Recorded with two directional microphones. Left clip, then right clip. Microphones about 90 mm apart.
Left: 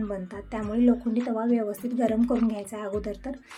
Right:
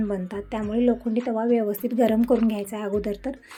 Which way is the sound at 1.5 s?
40° right (ahead or behind).